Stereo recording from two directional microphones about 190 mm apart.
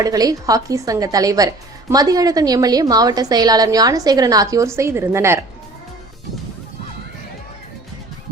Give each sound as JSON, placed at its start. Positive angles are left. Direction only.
{"t": 0.0, "sound": "a woman's voice", "side_deg": -20}